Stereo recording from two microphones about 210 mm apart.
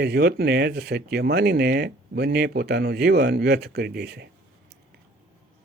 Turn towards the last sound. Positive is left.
turn(degrees=-50)  # may be behind; listen again after turning